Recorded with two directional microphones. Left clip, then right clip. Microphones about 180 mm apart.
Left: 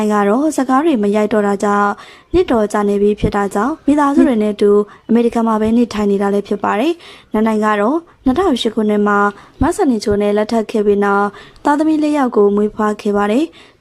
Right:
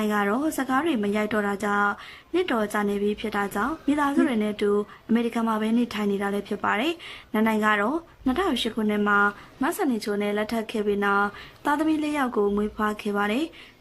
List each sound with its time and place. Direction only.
0.0 s speech: 35° left (ahead or behind)